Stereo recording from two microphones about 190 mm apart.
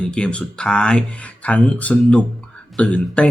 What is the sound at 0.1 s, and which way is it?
A man's voice, 5° left (ahead or behind).